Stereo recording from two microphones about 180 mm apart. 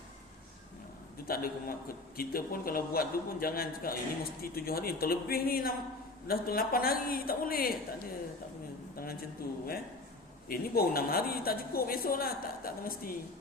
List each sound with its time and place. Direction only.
1.3 s a man's voice: 55° left (ahead or behind)
9.4 s a man's voice: 55° left (ahead or behind)